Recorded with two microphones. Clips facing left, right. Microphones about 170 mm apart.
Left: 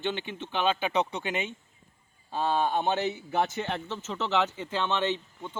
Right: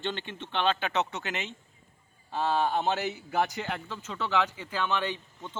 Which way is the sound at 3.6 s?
25° left (ahead or behind).